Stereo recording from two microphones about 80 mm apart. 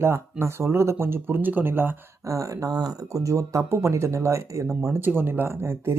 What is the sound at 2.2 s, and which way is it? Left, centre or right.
Speech, right.